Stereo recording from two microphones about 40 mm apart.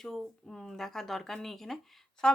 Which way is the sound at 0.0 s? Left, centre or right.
Centre.